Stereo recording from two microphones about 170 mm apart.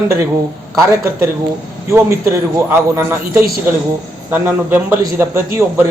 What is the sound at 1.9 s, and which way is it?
A man's voice, 15° right (ahead or behind).